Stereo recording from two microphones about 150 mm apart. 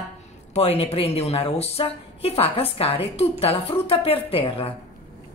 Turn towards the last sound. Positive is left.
turn(degrees=35)  # may be behind; listen again after turning